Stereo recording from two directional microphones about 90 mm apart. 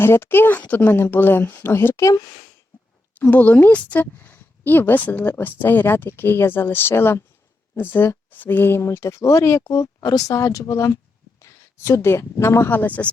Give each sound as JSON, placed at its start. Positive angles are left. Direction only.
{"t": 0.0, "sound": "a woman's voice", "side_deg": 25}
{"t": 3.2, "sound": "a woman's voice", "side_deg": 15}